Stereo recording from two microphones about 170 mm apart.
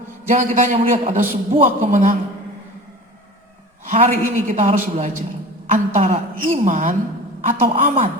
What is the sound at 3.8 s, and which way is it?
A woman's voice, 45° right (ahead or behind).